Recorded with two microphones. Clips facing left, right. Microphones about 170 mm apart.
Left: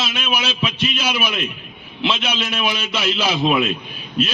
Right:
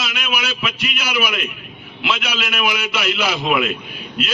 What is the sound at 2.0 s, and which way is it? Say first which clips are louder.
A man's voice: left 1 dB; 25° left (ahead or behind).